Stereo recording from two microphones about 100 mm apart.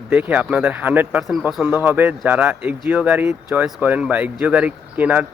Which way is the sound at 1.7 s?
20° right (ahead or behind).